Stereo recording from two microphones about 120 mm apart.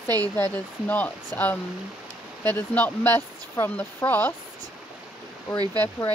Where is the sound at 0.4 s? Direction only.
15° left (ahead or behind).